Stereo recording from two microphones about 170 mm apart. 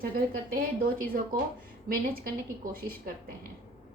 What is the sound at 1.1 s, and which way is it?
Speech, 55° right (ahead or behind).